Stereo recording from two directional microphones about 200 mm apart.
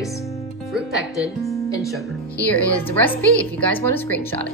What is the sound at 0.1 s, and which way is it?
Music, centre (ahead or behind).